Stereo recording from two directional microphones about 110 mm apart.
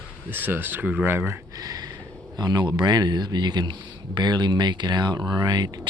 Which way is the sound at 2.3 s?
40° right (ahead or behind).